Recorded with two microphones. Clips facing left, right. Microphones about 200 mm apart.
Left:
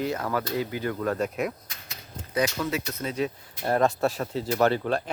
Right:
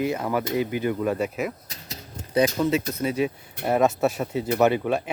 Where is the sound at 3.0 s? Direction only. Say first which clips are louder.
Right 4 dB; 10° right (ahead or behind).